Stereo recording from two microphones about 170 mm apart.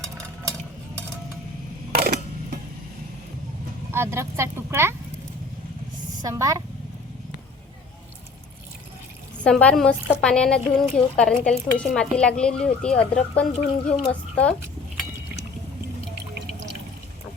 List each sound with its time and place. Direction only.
3.9 s speech: 15° right (ahead or behind)
6.2 s a woman's voice: 20° right (ahead or behind)
9.4 s a woman's voice: 5° left (ahead or behind)